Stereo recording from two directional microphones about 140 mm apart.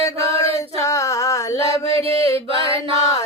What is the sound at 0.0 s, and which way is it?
Male singing, 20° left (ahead or behind).